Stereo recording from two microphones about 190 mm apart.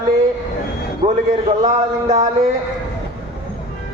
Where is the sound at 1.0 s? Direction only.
30° right (ahead or behind).